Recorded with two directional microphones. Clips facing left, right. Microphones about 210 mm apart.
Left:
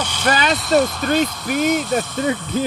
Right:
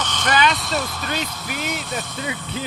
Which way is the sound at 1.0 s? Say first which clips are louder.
Left 9 dB; 45° left (ahead or behind).